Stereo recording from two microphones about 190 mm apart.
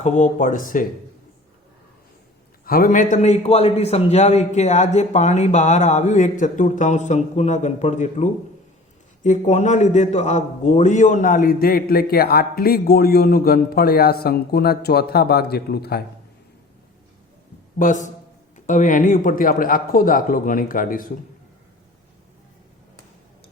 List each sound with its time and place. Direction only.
0.0 s a man's voice: 45° left (ahead or behind)
2.6 s a man's voice: 50° left (ahead or behind)
17.7 s a man's voice: 45° left (ahead or behind)